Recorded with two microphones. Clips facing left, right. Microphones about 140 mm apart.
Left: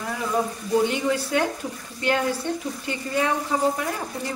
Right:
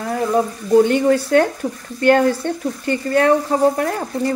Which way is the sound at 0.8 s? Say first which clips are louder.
Right 8 dB; 50° right (ahead or behind).